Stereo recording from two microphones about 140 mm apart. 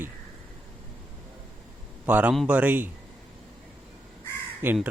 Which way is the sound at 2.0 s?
10° right (ahead or behind).